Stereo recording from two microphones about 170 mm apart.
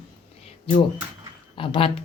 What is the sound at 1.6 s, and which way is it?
Speech, 30° left (ahead or behind).